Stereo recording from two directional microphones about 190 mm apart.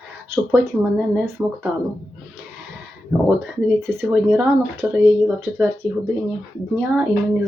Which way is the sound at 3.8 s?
10° right (ahead or behind).